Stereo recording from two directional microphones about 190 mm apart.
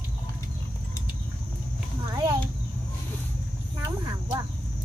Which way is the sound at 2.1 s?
15° right (ahead or behind).